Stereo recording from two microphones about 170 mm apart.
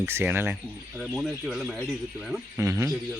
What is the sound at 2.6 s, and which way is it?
Speech, 20° right (ahead or behind).